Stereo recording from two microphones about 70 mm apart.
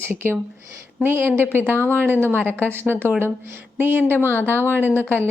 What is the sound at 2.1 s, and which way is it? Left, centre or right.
Speech, right.